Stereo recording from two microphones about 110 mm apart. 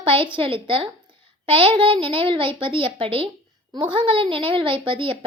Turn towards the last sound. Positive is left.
turn(degrees=-55)  # may be behind; listen again after turning